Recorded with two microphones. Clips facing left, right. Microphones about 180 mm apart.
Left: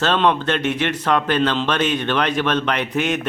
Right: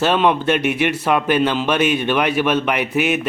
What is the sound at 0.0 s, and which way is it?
Speech, 10° right (ahead or behind).